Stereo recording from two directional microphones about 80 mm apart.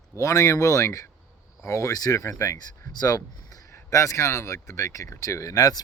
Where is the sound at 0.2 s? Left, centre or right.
Left.